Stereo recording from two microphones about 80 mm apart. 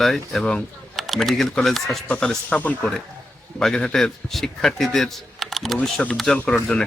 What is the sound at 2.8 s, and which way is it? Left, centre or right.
Speech, centre.